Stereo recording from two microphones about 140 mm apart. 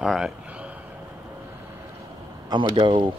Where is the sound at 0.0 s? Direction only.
5° right (ahead or behind).